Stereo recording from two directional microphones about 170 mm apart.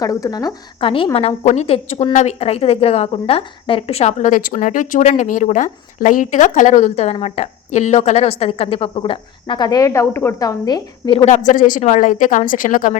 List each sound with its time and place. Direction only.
0.0 s a woman's voice: 20° left (ahead or behind)
11.3 s a woman's voice: 50° left (ahead or behind)